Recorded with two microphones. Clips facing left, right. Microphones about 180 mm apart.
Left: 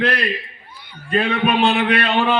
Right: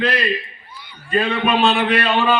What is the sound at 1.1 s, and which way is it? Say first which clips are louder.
A man's voice: even; 65° left (ahead or behind).